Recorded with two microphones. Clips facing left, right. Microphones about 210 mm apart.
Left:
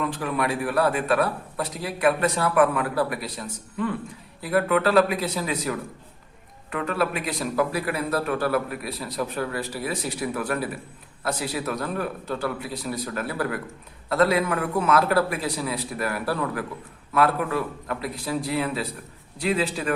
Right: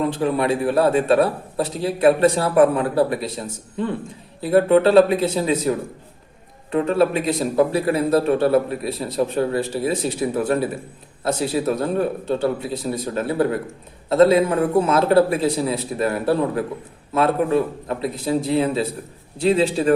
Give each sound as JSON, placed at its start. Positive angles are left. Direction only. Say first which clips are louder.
{"t": 0.0, "sound": "a man's voice", "louder": "right 6 dB", "side_deg": -30}